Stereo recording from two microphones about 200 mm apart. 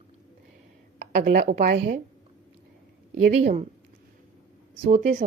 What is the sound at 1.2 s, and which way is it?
Speech, 45° right (ahead or behind).